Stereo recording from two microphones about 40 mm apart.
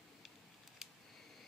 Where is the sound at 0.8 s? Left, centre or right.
Centre.